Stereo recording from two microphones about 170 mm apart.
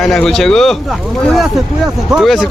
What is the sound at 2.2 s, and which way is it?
Speech, centre (ahead or behind).